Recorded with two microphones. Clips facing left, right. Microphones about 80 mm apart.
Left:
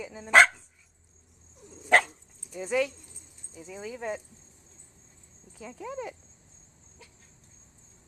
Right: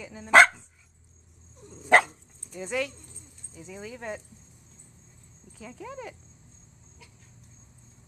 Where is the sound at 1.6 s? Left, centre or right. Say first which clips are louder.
Right 2 dB; centre.